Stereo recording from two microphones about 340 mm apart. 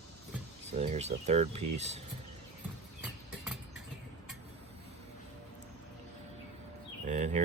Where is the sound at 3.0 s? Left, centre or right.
Centre.